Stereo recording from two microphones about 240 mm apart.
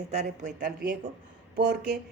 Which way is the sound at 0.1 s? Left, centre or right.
Right.